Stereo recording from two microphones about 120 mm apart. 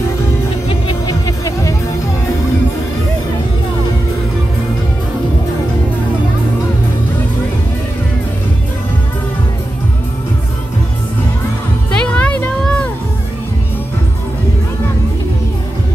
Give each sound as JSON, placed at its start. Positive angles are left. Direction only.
{"t": 1.2, "sound": "music", "side_deg": 25}
{"t": 12.0, "sound": "music", "side_deg": 10}